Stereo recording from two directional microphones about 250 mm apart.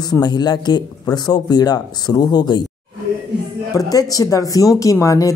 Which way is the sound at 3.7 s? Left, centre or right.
Centre.